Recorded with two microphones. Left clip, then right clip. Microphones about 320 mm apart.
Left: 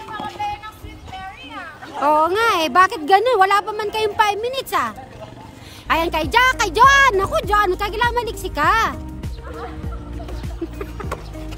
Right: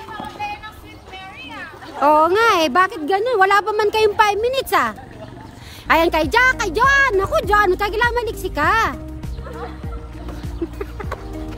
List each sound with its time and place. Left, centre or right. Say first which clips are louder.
0.1 s music: left 2 dB; centre
1.1 s a sound: left 1 dB; centre
2.0 s a woman's voice: right 2 dB; centre
10.6 s music: right 3 dB; centre